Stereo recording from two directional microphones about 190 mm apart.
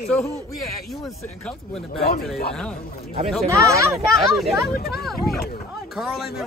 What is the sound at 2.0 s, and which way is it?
Speech, 50° left (ahead or behind).